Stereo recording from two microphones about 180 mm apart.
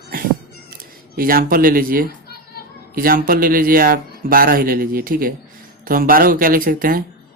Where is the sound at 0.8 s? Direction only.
55° right (ahead or behind).